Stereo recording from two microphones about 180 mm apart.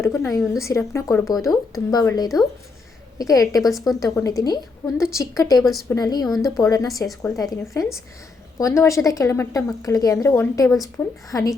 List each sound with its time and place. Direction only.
0.0 s a woman's voice: 15° left (ahead or behind)
5.5 s speech: centre (ahead or behind)
5.9 s a woman's voice: 20° left (ahead or behind)
6.2 s speech: centre (ahead or behind)
6.6 s a woman's voice: 20° left (ahead or behind)